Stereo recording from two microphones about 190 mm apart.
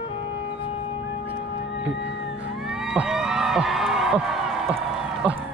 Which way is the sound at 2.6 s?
Centre (ahead or behind).